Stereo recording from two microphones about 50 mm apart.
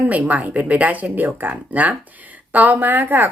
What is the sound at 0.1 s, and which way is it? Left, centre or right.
A woman's voice, right.